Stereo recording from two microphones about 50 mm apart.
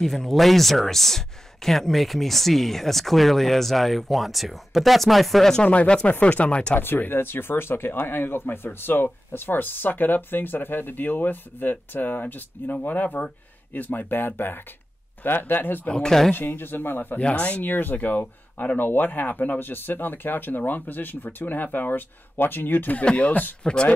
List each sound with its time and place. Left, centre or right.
0.0 s speech: centre
5.7 s speech: left
6.8 s speech: left
15.9 s speech: centre
16.3 s speech: left
17.2 s speech: left
17.6 s speech: left
23.6 s speech: centre